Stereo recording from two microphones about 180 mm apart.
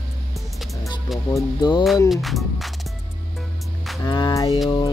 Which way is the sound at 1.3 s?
25° left (ahead or behind).